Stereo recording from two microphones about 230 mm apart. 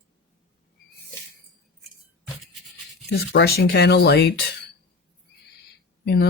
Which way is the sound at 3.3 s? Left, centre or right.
Left.